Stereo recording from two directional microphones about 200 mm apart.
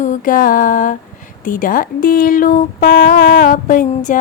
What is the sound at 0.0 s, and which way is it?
Speech, 40° left (ahead or behind).